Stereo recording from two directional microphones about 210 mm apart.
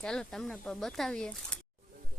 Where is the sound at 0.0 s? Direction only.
5° left (ahead or behind).